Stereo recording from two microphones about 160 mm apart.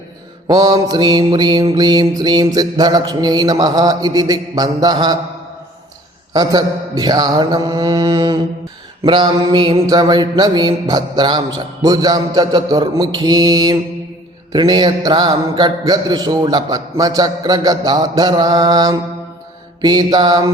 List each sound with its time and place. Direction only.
0.4 s mantra: 25° right (ahead or behind)
6.3 s mantra: 25° right (ahead or behind)